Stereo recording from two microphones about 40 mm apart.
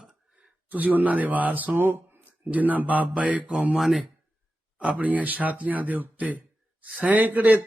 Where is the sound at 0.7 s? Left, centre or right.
Right.